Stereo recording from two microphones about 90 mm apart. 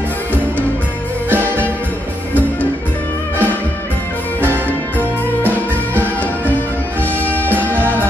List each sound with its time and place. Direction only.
1.3 s music: 20° right (ahead or behind)
4.9 s music: 20° right (ahead or behind)